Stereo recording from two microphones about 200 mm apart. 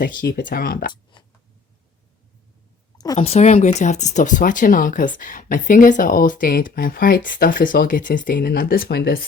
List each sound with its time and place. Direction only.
0.2 s speech: 50° left (ahead or behind)
1.1 s a sound: 25° left (ahead or behind)
3.2 s speech: 35° left (ahead or behind); by 9.2 s 55° left (ahead or behind)